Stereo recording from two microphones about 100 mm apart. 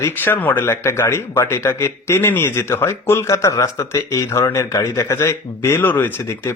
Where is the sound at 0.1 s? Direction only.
20° left (ahead or behind).